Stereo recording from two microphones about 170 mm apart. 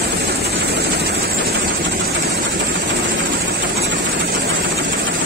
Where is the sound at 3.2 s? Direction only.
65° right (ahead or behind); by 5.0 s 90° right.